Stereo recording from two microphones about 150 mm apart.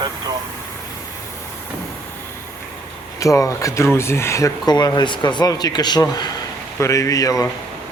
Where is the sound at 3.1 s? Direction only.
20° left (ahead or behind).